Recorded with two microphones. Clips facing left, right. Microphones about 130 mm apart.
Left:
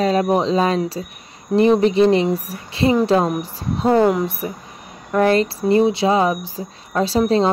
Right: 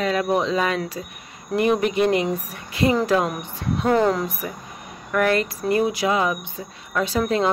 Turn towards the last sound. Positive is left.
turn(degrees=30)  # may be behind; listen again after turning